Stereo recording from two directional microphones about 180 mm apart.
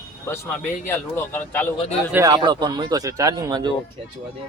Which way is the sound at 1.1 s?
10° left (ahead or behind).